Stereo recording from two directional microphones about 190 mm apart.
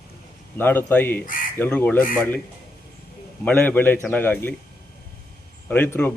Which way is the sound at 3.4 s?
10° left (ahead or behind).